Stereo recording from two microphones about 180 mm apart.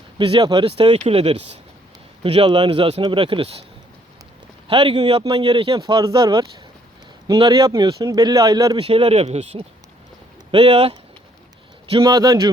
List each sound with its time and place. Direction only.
0.2 s speech: 25° right (ahead or behind)
4.7 s speech: 30° right (ahead or behind)